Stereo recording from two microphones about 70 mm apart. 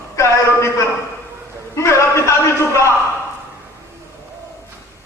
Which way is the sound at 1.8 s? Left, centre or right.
Left.